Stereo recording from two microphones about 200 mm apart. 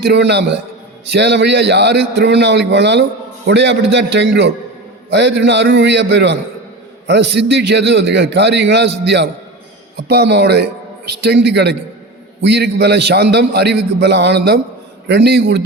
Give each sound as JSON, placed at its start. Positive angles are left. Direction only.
{"t": 0.0, "sound": "a man's voice", "side_deg": -60}